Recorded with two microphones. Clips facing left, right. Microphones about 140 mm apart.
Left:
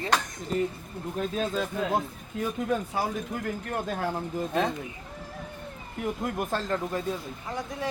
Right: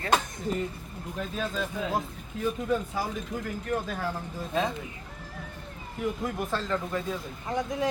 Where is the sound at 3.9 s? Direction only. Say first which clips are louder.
Left 3 dB; 55° left (ahead or behind).